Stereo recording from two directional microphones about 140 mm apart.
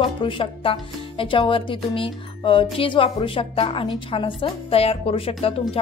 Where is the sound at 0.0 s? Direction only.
40° left (ahead or behind).